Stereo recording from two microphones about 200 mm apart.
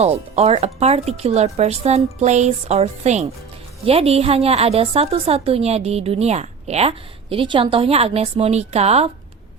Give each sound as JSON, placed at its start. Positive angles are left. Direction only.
{"t": 0.0, "sound": "a woman's voice", "side_deg": -30}